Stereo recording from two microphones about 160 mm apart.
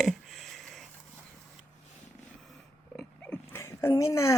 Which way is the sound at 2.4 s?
Centre (ahead or behind).